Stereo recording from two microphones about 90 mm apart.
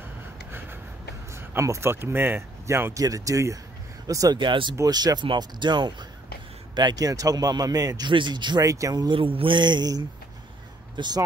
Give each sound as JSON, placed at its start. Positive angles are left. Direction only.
{"t": 1.3, "sound": "speech", "side_deg": -30}
{"t": 4.4, "sound": "speech", "side_deg": -60}
{"t": 4.8, "sound": "a man's voice", "side_deg": -50}
{"t": 5.2, "sound": "a man's voice", "side_deg": -60}
{"t": 8.1, "sound": "speech", "side_deg": -60}
{"t": 8.6, "sound": "speech", "side_deg": -40}
{"t": 9.1, "sound": "a man's voice", "side_deg": -75}